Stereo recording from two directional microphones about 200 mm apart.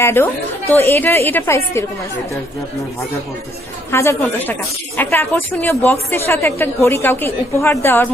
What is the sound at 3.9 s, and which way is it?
A woman's voice, 15° left (ahead or behind).